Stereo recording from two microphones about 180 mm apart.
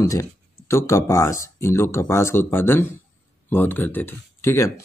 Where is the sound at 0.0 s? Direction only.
15° left (ahead or behind).